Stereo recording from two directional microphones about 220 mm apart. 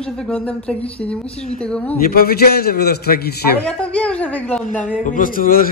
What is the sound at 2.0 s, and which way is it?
A man's voice, 45° left (ahead or behind).